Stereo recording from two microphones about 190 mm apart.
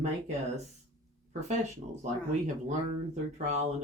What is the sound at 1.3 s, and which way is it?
Speech, 40° right (ahead or behind).